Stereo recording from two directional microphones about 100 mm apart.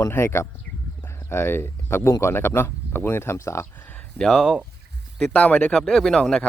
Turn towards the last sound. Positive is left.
turn(degrees=5)  # may be behind; listen again after turning